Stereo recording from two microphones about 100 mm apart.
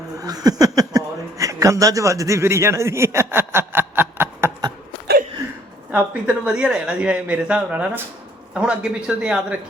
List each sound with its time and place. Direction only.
0.2 s speech: 40° right (ahead or behind)
5.9 s speech: 15° right (ahead or behind)